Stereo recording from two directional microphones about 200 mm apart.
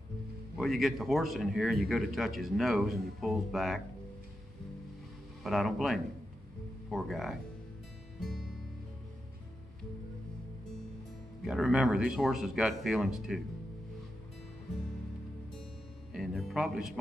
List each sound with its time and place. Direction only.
0.6 s speech: centre (ahead or behind)
5.4 s speech: centre (ahead or behind)
8.2 s music: centre (ahead or behind)
11.4 s speech: centre (ahead or behind)
16.1 s music: centre (ahead or behind)